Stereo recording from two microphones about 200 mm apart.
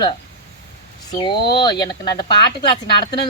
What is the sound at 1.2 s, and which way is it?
Female singing, 25° left (ahead or behind).